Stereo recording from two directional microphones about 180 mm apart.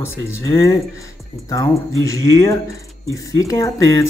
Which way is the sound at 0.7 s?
20° left (ahead or behind).